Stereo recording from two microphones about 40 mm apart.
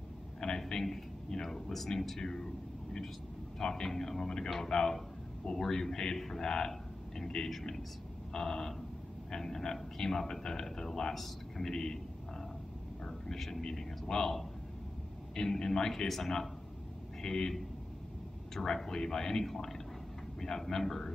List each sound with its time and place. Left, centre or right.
0.4 s a sound: centre
3.5 s a man's voice: centre
11.7 s speech: centre
13.0 s a man's voice: centre
19.5 s a man's voice: centre